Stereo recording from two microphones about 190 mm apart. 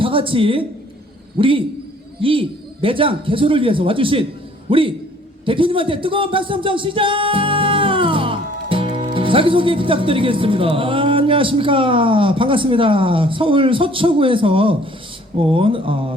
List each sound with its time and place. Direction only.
0.0 s a woman's voice: 30° right (ahead or behind)